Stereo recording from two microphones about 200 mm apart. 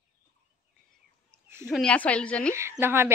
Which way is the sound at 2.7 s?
10° right (ahead or behind).